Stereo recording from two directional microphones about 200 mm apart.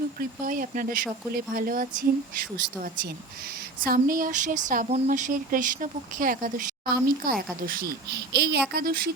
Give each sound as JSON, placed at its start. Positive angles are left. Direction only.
{"t": 0.2, "sound": "speech", "side_deg": -45}
{"t": 3.8, "sound": "speech", "side_deg": -45}